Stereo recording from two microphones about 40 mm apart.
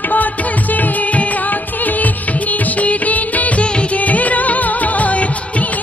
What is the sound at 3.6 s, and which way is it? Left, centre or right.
Music, left.